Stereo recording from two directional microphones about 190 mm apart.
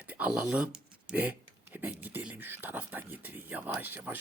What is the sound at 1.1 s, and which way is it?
Speech, 10° right (ahead or behind).